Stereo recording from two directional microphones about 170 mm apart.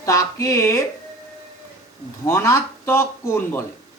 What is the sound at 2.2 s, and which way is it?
Speech, 15° left (ahead or behind).